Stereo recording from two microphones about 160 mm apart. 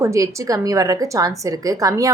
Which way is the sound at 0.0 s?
20° right (ahead or behind).